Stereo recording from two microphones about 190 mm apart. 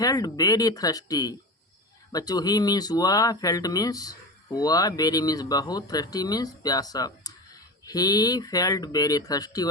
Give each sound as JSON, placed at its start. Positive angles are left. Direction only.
{"t": 0.0, "sound": "speech", "side_deg": 20}